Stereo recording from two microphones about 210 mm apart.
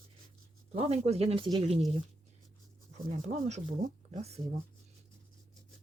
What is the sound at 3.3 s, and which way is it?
Speech, 35° right (ahead or behind).